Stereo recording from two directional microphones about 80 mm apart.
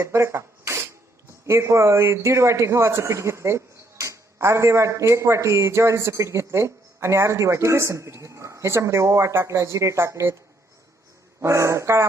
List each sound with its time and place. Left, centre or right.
0.0 s a sound: right
1.5 s speech: right
11.3 s speech: right